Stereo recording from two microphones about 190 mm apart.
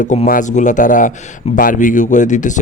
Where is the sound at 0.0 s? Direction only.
40° left (ahead or behind).